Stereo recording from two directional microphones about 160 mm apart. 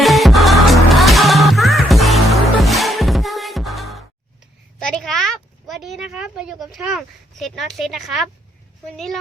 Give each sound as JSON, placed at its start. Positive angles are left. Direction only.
{"t": 0.0, "sound": "music", "side_deg": 0}
{"t": 4.8, "sound": "a sound", "side_deg": 5}
{"t": 8.9, "sound": "a woman's voice", "side_deg": 0}